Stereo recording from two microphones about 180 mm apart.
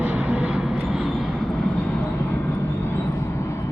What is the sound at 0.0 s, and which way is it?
Vehicle, 10° right (ahead or behind).